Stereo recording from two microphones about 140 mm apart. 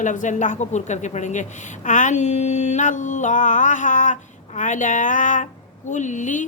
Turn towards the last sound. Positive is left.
turn(degrees=60)  # may be behind; listen again after turning